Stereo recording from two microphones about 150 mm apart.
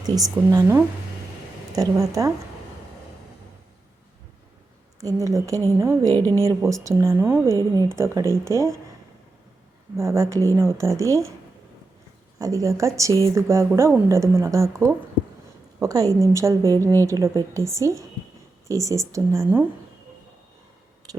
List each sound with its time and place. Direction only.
0.0 s speech: 25° right (ahead or behind)
4.9 s speech: 20° right (ahead or behind)
9.9 s speech: 20° right (ahead or behind)
12.4 s speech: 20° right (ahead or behind)
21.0 s a sound: 25° right (ahead or behind)